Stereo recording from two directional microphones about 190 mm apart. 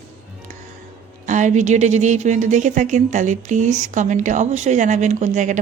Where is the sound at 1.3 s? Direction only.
40° right (ahead or behind).